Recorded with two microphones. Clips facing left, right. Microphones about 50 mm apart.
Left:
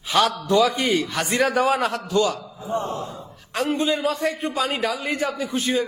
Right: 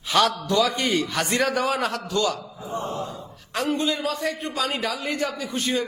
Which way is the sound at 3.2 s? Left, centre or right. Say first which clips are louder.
Left 2 dB; centre.